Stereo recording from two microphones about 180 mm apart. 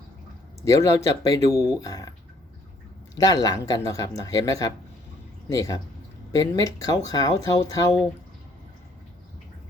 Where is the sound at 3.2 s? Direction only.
20° left (ahead or behind).